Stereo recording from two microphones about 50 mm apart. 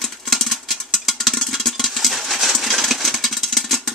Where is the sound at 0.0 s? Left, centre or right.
Centre.